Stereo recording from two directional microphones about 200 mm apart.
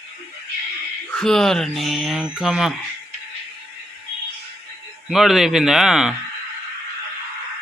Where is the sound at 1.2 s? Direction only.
Centre (ahead or behind).